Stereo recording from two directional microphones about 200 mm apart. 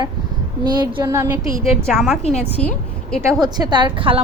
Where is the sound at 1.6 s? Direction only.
Centre (ahead or behind).